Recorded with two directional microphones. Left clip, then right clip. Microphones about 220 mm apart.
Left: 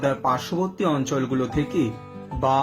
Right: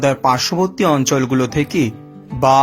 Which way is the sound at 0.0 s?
50° right (ahead or behind).